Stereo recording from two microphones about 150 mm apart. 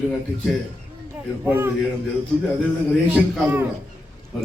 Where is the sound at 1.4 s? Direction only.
15° right (ahead or behind).